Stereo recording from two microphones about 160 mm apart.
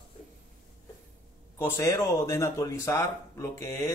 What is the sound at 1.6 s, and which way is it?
A man's voice, 20° left (ahead or behind).